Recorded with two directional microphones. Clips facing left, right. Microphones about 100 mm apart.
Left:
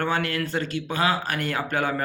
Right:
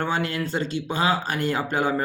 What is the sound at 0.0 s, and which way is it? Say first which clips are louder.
Speech: even; 25° right (ahead or behind).